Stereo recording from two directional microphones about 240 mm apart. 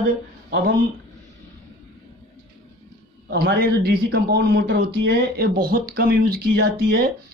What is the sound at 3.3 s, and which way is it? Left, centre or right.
A man's voice, right.